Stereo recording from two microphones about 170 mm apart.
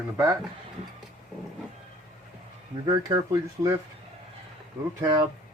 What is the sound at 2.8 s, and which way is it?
Speech, 20° right (ahead or behind).